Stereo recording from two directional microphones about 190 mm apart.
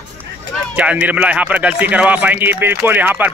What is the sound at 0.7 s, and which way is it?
Speech, 5° right (ahead or behind).